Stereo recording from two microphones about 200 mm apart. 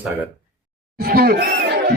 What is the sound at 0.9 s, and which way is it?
Speech, 50° right (ahead or behind).